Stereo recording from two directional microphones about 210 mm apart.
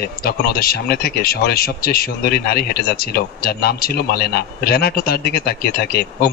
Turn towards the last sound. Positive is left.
turn(degrees=45)  # may be behind; listen again after turning